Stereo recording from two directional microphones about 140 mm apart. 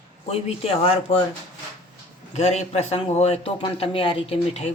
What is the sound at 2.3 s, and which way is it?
A man's voice, 50° left (ahead or behind).